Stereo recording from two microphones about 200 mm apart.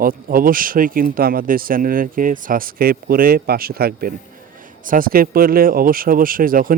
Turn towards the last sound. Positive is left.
turn(degrees=-45)  # may be behind; listen again after turning